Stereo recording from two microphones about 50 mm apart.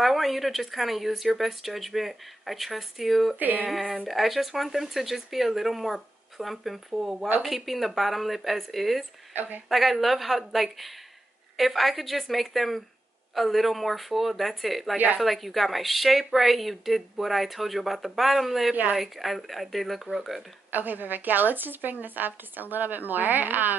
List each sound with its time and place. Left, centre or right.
0.0 s speech: centre
3.3 s a woman's voice: right
4.1 s speech: centre
7.4 s speech: centre
9.3 s a woman's voice: right
9.7 s speech: centre
20.7 s a woman's voice: right